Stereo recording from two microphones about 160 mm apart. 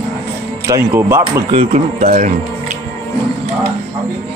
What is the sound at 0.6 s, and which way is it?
Speech, 15° right (ahead or behind).